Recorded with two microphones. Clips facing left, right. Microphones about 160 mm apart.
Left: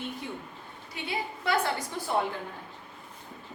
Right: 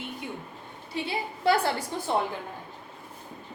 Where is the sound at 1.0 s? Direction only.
30° right (ahead or behind).